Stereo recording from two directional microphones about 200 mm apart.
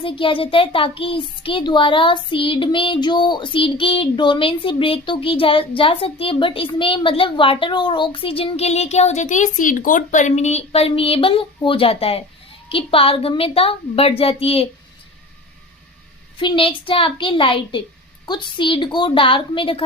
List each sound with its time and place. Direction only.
0.0 s a child's voice: 25° left (ahead or behind)
16.4 s a child's voice: 25° left (ahead or behind)